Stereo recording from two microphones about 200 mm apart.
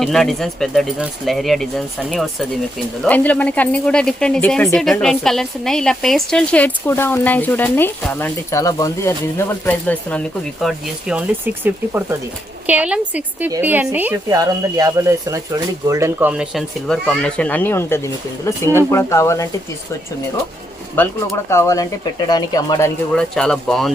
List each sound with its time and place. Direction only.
0.0 s speech: centre (ahead or behind)
21.0 s speech: 10° left (ahead or behind)
23.1 s speech: 5° left (ahead or behind)